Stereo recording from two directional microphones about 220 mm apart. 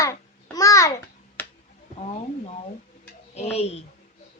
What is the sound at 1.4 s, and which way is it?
Finger snapping, 10° left (ahead or behind).